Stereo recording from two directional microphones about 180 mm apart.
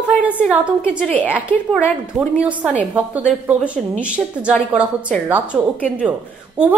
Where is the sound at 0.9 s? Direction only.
5° left (ahead or behind).